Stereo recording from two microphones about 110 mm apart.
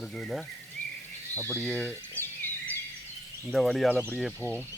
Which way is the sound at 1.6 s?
10° left (ahead or behind).